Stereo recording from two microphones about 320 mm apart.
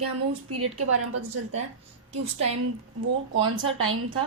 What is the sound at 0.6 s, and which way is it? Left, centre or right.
Speech, right.